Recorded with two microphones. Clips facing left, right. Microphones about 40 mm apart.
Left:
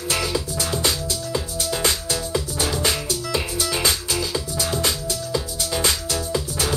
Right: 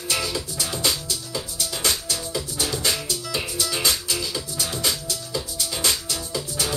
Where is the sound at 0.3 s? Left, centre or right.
Left.